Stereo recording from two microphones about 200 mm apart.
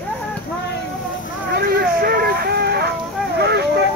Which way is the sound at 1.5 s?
50° right (ahead or behind).